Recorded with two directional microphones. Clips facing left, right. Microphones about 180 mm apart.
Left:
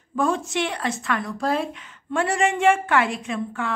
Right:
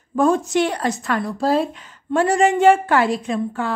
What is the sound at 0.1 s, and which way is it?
A woman's voice, 40° right (ahead or behind).